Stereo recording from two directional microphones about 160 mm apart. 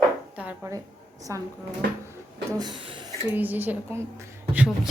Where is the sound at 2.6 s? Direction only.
30° right (ahead or behind).